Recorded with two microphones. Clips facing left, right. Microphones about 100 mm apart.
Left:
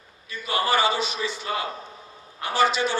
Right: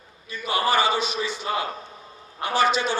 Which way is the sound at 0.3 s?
15° right (ahead or behind).